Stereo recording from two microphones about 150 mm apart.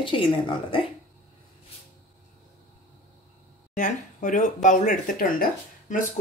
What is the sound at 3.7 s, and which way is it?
Speech, 55° left (ahead or behind).